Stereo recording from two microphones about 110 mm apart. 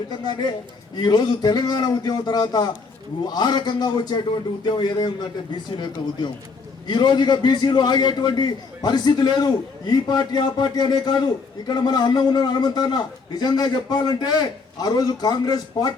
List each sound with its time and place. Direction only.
0.1 s a man's voice: 40° left (ahead or behind)